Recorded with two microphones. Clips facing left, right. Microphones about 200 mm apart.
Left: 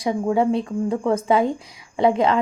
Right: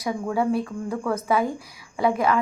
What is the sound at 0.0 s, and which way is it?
Speech, 25° left (ahead or behind).